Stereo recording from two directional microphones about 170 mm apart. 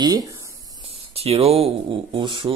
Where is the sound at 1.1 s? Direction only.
35° right (ahead or behind).